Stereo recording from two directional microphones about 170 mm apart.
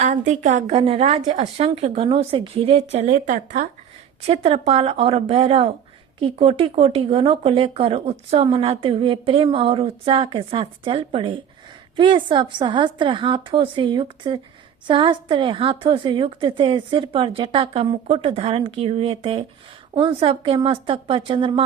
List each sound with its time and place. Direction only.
0.0 s a woman's voice: 45° right (ahead or behind)
4.3 s a woman's voice: 35° right (ahead or behind)